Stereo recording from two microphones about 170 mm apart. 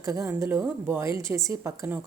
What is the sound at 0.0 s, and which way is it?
A woman's voice, 20° right (ahead or behind).